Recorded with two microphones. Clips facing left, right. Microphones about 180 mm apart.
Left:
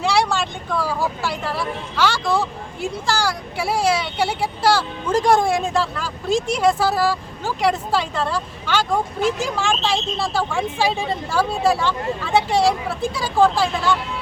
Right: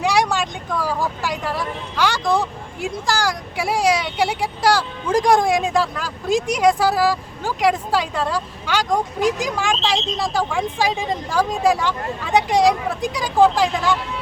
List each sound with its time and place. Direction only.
0.0 s speech: 15° right (ahead or behind)